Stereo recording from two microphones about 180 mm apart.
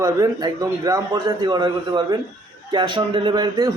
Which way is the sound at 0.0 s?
20° right (ahead or behind).